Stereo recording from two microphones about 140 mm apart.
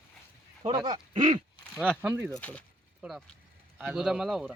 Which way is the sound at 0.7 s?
30° right (ahead or behind).